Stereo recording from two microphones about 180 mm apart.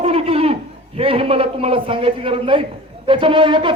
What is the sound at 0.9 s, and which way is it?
Speech, 30° right (ahead or behind).